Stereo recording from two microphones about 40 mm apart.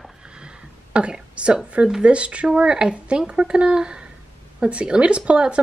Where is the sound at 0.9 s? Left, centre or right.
Right.